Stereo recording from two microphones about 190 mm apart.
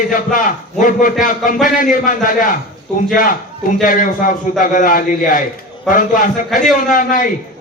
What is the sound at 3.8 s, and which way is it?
A man's voice, 45° left (ahead or behind).